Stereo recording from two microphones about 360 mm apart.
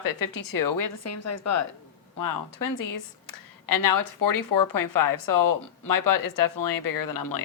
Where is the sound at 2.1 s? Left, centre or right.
Left.